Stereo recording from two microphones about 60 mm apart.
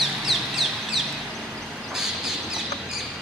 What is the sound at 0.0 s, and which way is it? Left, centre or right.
Crow, centre.